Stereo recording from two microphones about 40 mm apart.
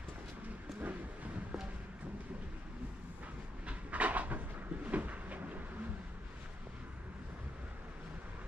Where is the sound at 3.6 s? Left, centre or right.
Right.